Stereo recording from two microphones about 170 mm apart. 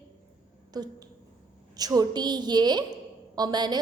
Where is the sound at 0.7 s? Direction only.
25° right (ahead or behind).